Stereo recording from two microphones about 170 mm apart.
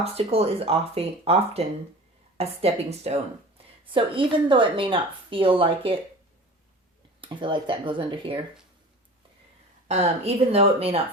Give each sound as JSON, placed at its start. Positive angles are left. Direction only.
{"t": 0.0, "sound": "a woman's voice", "side_deg": -35}
{"t": 7.2, "sound": "speech", "side_deg": -30}
{"t": 9.9, "sound": "a woman's voice", "side_deg": -40}